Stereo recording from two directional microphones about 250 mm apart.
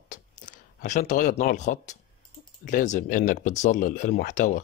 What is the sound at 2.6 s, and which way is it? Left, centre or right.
Speech, left.